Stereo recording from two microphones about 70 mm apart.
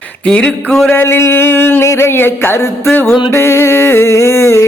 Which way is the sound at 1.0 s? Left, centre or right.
Left.